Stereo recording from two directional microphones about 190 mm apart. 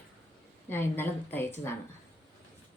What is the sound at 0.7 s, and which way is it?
Speech, 10° left (ahead or behind).